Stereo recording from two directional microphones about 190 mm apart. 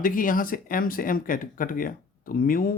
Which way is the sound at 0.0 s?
45° left (ahead or behind).